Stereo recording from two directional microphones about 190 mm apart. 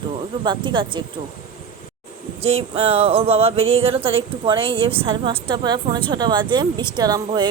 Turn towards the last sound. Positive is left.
turn(degrees=-20)  # may be behind; listen again after turning